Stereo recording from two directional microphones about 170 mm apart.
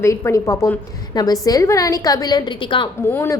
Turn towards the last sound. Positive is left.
turn(degrees=15)  # may be behind; listen again after turning